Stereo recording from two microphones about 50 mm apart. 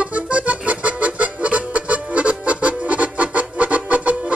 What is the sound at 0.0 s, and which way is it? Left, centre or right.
Music, right.